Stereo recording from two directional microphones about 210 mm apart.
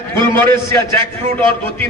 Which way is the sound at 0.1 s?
10° left (ahead or behind).